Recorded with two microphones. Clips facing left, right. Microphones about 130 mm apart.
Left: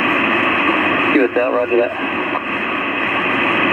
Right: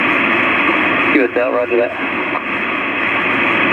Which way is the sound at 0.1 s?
20° left (ahead or behind).